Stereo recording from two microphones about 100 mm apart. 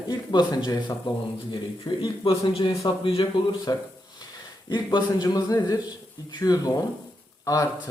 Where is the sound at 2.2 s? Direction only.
60° left (ahead or behind).